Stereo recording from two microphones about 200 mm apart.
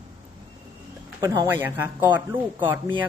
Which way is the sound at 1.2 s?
15° right (ahead or behind).